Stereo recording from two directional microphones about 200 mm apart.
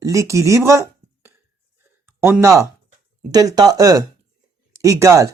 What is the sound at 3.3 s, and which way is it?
Speech, 20° right (ahead or behind).